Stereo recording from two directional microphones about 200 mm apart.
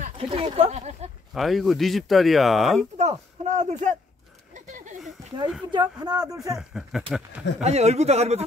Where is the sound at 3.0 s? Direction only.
35° right (ahead or behind).